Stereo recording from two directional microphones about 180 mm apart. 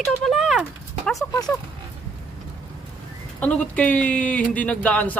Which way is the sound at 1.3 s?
15° left (ahead or behind).